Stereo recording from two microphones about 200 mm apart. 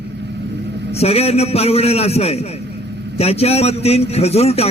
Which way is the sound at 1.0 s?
30° left (ahead or behind).